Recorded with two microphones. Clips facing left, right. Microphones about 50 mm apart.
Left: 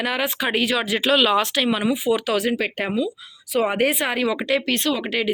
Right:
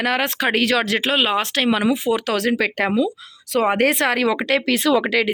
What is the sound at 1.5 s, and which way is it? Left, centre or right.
Speech, right.